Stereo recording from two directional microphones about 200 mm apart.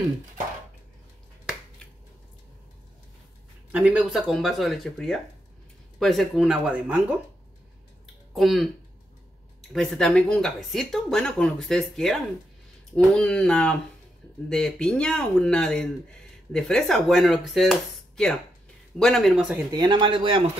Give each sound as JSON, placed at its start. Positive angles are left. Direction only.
{"t": 3.7, "sound": "speech", "side_deg": -5}
{"t": 8.4, "sound": "speech", "side_deg": 0}
{"t": 19.7, "sound": "speech", "side_deg": -20}